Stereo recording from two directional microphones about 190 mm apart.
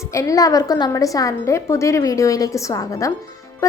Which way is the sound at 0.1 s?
15° left (ahead or behind).